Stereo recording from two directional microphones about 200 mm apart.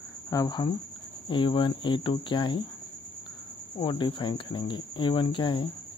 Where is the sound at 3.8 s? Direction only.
25° left (ahead or behind).